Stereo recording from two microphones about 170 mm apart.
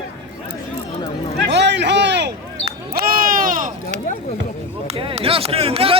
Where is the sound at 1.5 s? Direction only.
90° right.